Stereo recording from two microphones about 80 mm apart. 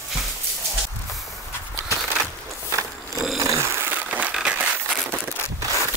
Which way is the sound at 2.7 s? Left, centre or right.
Right.